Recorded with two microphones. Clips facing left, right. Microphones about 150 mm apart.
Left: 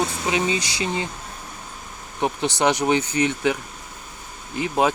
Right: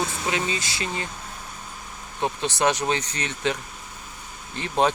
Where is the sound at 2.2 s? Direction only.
15° left (ahead or behind).